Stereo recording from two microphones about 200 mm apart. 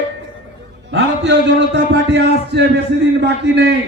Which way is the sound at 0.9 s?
65° right (ahead or behind).